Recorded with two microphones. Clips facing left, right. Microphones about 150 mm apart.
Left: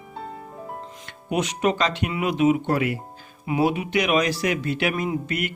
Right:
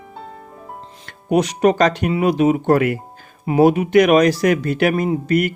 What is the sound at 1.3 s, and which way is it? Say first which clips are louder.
Speech: right 7 dB; 40° right (ahead or behind).